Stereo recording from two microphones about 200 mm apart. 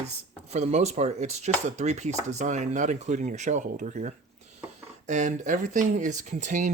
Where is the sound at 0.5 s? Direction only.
35° right (ahead or behind).